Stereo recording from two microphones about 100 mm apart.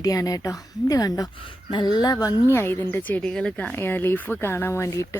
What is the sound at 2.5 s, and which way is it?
Speech, 25° left (ahead or behind).